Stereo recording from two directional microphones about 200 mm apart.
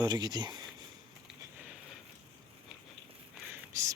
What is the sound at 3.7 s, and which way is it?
Whispering, 15° right (ahead or behind).